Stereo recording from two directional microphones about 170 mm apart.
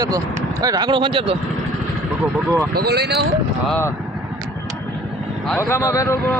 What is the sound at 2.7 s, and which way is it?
Speech, 70° right (ahead or behind).